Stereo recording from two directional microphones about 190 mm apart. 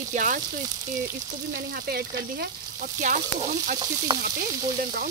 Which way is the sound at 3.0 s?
40° right (ahead or behind).